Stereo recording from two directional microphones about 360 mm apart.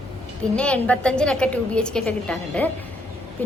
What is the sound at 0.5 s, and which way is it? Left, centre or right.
A woman's voice, centre.